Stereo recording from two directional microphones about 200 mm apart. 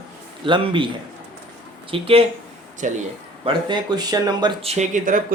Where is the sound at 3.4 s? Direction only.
20° right (ahead or behind); by 5.2 s 40° right (ahead or behind).